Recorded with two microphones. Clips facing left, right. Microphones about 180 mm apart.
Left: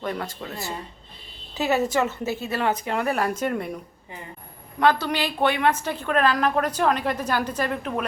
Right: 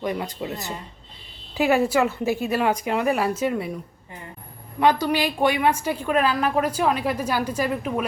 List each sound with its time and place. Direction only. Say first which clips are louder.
0.0 s a woman's voice: right 3 dB; 15° right (ahead or behind)
4.8 s a woman's voice: right 2 dB; 10° right (ahead or behind)